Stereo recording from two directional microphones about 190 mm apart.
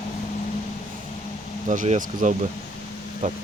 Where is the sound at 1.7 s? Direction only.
40° right (ahead or behind).